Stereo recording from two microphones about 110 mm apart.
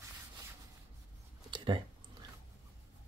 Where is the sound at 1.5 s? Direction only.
45° right (ahead or behind).